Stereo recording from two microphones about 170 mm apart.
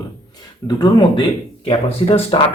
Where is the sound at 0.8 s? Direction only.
25° left (ahead or behind).